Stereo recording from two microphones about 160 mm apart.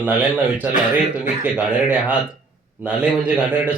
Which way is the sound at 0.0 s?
10° right (ahead or behind).